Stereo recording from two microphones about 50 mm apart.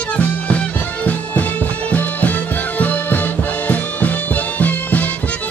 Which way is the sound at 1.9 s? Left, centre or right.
Left.